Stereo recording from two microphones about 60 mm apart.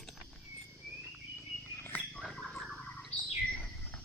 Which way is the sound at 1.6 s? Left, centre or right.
Left.